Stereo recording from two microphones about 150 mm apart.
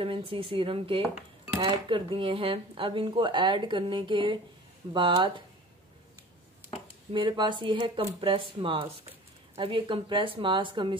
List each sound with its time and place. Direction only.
0.0 s speech: 35° right (ahead or behind)
7.1 s speech: 30° right (ahead or behind)